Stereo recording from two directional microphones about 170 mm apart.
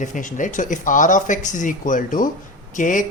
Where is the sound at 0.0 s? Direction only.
50° left (ahead or behind).